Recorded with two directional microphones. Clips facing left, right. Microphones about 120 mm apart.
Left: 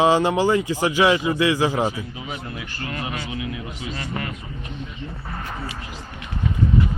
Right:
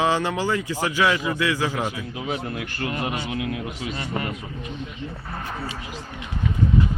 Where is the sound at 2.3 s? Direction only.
55° right (ahead or behind).